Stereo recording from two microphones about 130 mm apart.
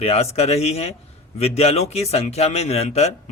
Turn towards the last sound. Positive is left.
turn(degrees=55)  # may be behind; listen again after turning